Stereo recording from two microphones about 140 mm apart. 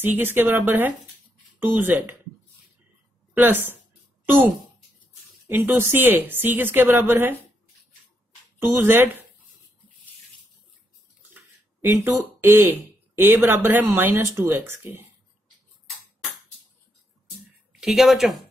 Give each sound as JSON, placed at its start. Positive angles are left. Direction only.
{"t": 0.0, "sound": "speech", "side_deg": -15}
{"t": 3.3, "sound": "speech", "side_deg": -15}
{"t": 5.5, "sound": "speech", "side_deg": -15}
{"t": 8.5, "sound": "speech", "side_deg": -15}
{"t": 11.3, "sound": "speech", "side_deg": -15}
{"t": 17.7, "sound": "speech", "side_deg": 0}